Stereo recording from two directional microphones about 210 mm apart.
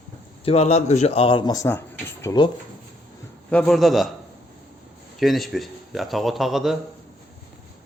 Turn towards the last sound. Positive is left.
turn(degrees=0)  # may be behind; listen again after turning